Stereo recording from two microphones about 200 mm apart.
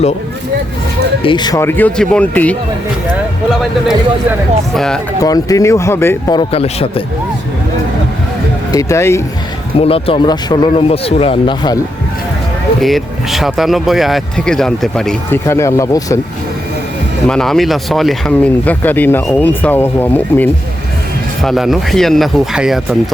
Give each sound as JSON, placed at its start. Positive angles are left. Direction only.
{"t": 1.2, "sound": "speech", "side_deg": 25}
{"t": 3.6, "sound": "speech", "side_deg": 0}
{"t": 5.2, "sound": "speech", "side_deg": 15}
{"t": 8.7, "sound": "speech", "side_deg": 15}
{"t": 9.7, "sound": "speech", "side_deg": 30}
{"t": 12.8, "sound": "speech", "side_deg": 0}
{"t": 15.4, "sound": "speech", "side_deg": 15}
{"t": 17.2, "sound": "speech", "side_deg": 5}
{"t": 21.4, "sound": "speech", "side_deg": 0}